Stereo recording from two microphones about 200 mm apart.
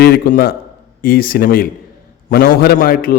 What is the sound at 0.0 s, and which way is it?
A man's voice, 50° left (ahead or behind).